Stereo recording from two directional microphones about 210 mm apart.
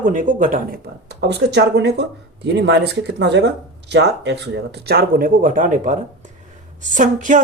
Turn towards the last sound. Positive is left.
turn(degrees=-40)  # may be behind; listen again after turning